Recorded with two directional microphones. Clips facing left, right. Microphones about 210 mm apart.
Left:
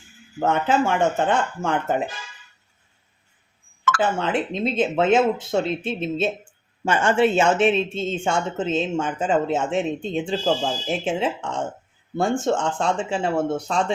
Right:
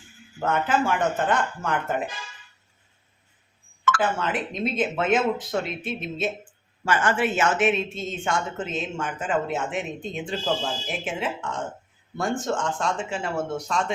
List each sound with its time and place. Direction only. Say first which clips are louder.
0.3 s speech: left 3 dB; 25° left (ahead or behind)
3.9 s speech: left 5 dB; 30° left (ahead or behind)